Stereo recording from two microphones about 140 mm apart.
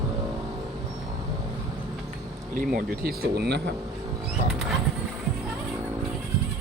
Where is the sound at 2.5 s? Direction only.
85° right.